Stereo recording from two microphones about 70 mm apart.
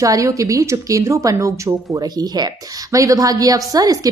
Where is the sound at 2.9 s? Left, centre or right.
Right.